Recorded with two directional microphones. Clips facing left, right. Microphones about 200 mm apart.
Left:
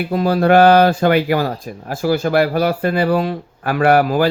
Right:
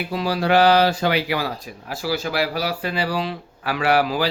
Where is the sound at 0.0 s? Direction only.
50° left (ahead or behind).